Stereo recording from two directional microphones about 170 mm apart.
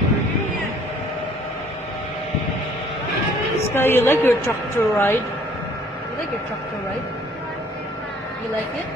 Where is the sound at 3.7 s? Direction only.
15° left (ahead or behind).